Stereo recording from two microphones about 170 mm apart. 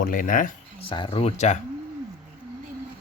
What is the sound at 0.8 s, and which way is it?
Speech, 30° left (ahead or behind).